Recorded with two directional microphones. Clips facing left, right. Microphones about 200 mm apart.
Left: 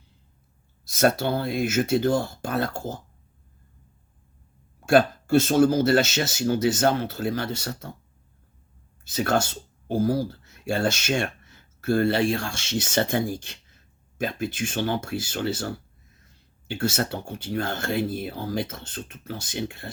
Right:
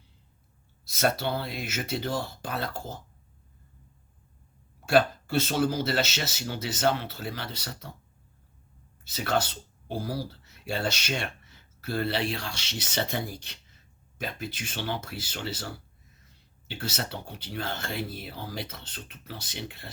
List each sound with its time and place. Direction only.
0.9 s speech: 50° left (ahead or behind)
4.9 s speech: 50° left (ahead or behind)
9.0 s speech: 50° left (ahead or behind)